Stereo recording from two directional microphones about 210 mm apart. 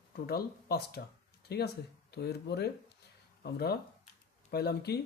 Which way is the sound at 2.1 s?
50° left (ahead or behind).